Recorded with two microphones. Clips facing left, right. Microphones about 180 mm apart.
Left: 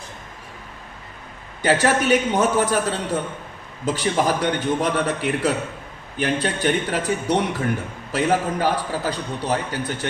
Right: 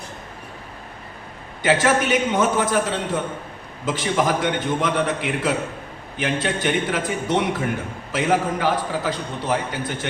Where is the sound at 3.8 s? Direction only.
40° left (ahead or behind).